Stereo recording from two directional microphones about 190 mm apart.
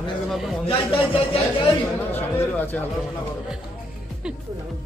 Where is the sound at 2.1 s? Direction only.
10° left (ahead or behind).